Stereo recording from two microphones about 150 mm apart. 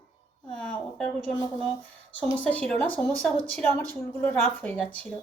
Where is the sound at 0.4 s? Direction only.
5° left (ahead or behind).